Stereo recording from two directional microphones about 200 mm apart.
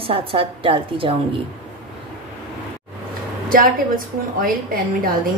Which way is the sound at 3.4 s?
45° right (ahead or behind).